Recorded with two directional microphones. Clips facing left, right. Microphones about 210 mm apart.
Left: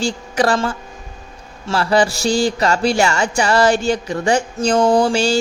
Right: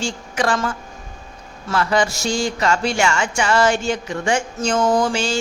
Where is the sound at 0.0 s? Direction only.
35° left (ahead or behind).